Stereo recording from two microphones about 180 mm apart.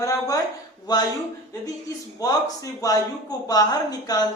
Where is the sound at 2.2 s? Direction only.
20° left (ahead or behind).